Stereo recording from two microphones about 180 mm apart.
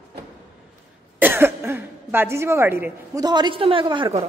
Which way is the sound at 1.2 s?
10° right (ahead or behind).